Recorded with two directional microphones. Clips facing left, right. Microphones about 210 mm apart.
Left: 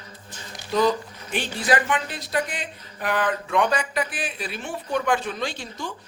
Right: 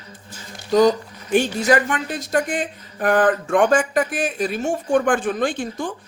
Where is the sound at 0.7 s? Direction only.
45° right (ahead or behind).